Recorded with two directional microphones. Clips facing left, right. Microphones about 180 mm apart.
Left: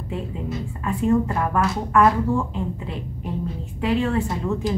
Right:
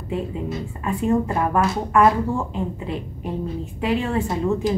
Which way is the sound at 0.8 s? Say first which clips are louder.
Left 1 dB; 15° right (ahead or behind).